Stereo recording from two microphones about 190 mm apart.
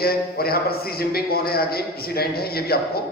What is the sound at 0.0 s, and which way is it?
A man's voice, 55° left (ahead or behind).